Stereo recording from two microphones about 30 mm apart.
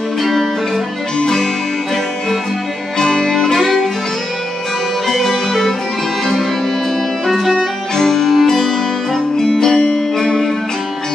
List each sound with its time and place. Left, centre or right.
0.2 s music: centre
1.2 s music: left
3.0 s music: left
5.0 s music: centre
7.9 s music: centre